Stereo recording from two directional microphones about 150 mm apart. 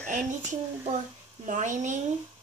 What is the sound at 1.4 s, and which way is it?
Speech, 55° right (ahead or behind).